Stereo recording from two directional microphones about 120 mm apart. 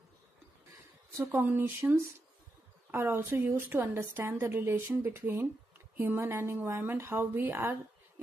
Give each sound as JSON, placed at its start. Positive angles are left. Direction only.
{"t": 1.1, "sound": "a woman's voice", "side_deg": -20}